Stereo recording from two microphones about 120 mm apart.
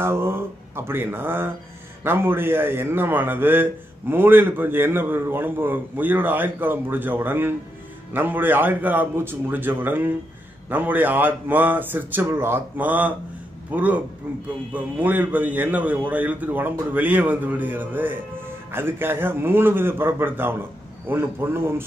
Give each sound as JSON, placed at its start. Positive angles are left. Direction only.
{"t": 0.0, "sound": "a man's voice", "side_deg": -20}